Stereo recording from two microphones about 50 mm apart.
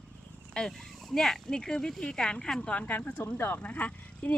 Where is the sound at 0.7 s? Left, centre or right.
Centre.